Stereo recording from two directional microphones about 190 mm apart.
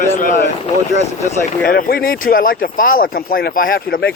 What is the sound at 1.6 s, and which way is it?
Speech, 50° left (ahead or behind).